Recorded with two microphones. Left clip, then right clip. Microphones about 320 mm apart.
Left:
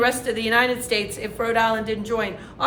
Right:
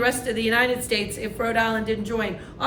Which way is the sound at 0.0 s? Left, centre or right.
Centre.